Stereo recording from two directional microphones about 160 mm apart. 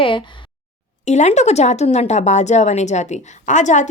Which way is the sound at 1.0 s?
45° left (ahead or behind).